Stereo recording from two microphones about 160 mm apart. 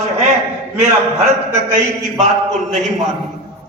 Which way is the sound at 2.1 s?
50° right (ahead or behind).